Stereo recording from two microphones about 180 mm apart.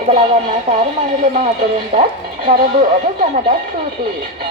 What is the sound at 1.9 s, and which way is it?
Speech, 35° right (ahead or behind).